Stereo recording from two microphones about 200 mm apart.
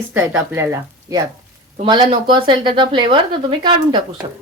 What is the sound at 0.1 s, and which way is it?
Speech, 10° right (ahead or behind).